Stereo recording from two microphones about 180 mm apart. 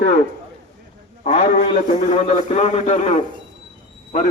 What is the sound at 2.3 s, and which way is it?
A man's voice, 40° left (ahead or behind).